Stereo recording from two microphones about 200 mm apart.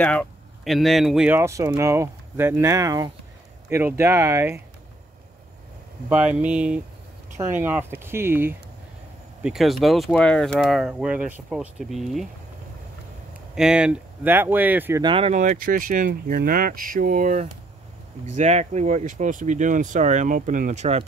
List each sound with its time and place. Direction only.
0.0 s speech: 5° left (ahead or behind); by 4.6 s 15° right (ahead or behind)
6.0 s speech: 5° right (ahead or behind)
13.3 s speech: 5° right (ahead or behind)
15.0 s speech: 30° right (ahead or behind)